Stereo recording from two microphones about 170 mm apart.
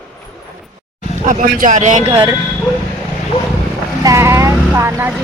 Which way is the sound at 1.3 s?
55° right (ahead or behind).